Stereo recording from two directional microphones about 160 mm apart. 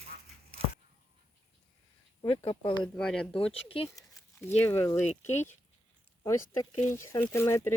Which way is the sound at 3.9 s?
20° left (ahead or behind).